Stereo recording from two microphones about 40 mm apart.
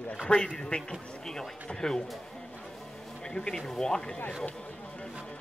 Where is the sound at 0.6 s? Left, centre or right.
Centre.